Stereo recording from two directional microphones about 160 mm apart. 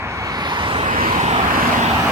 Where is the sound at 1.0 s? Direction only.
60° right (ahead or behind).